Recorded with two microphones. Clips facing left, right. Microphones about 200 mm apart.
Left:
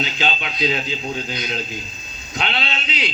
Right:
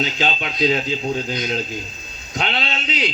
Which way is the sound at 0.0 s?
45° right (ahead or behind).